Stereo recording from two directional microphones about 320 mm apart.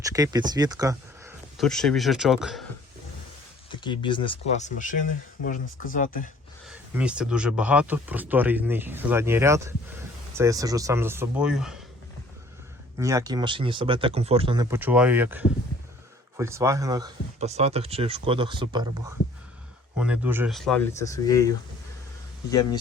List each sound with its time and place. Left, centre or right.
0.0 s speech: centre
1.6 s speech: centre
3.7 s speech: centre
6.7 s speech: centre
13.0 s speech: centre
20.0 s speech: centre